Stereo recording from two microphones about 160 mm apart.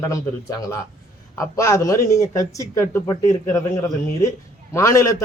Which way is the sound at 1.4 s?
20° left (ahead or behind).